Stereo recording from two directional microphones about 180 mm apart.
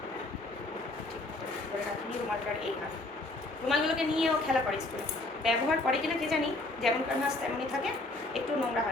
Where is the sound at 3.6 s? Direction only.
Centre (ahead or behind).